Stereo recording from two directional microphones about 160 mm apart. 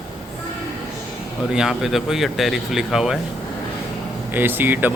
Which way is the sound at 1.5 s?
5° right (ahead or behind).